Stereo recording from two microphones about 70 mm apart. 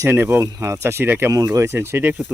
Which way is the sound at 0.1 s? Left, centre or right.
Right.